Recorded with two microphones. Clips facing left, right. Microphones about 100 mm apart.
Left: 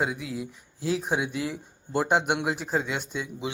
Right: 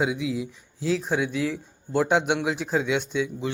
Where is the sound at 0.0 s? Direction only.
Centre (ahead or behind).